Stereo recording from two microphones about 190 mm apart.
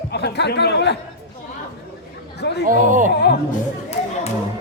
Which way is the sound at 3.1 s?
60° left (ahead or behind).